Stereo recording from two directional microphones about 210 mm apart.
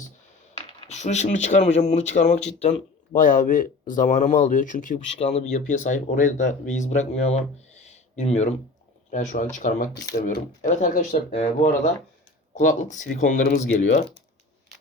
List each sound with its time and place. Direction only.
0.9 s speech: 35° left (ahead or behind)